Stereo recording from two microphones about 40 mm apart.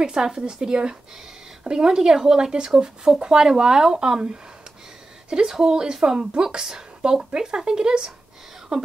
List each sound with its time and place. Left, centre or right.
0.0 s a woman's voice: centre